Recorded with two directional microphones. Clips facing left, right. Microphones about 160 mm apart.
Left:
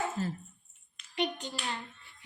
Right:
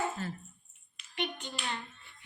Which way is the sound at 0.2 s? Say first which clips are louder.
Left 4 dB; 35° left (ahead or behind).